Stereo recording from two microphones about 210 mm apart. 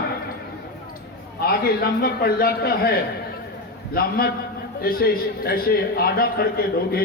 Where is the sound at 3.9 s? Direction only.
45° left (ahead or behind).